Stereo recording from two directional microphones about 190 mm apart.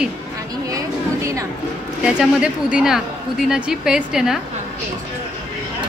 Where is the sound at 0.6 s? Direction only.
15° right (ahead or behind).